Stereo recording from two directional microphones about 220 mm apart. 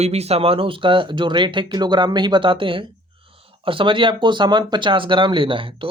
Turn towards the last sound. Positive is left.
turn(degrees=-25)  # may be behind; listen again after turning